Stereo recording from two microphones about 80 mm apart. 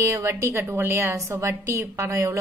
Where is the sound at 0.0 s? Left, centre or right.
Right.